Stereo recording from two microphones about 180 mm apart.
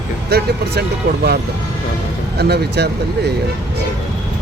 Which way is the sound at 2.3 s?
65° right (ahead or behind).